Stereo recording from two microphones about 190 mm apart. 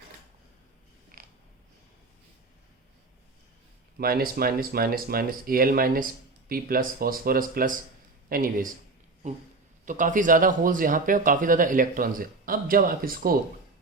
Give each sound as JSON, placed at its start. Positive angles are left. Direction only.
{"t": 1.1, "sound": "a sound", "side_deg": -50}
{"t": 3.9, "sound": "speech", "side_deg": -50}
{"t": 9.8, "sound": "speech", "side_deg": -45}